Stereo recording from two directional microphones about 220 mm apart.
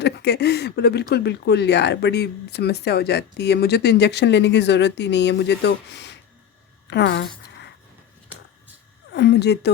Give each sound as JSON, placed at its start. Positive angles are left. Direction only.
{"t": 0.0, "sound": "speech", "side_deg": 50}
{"t": 6.8, "sound": "a sound", "side_deg": 50}
{"t": 9.1, "sound": "speech", "side_deg": 50}